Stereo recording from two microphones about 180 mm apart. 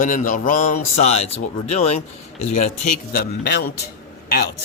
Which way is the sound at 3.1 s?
65° left (ahead or behind).